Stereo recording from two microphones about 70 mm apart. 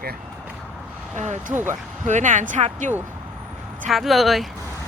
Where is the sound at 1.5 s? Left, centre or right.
Right.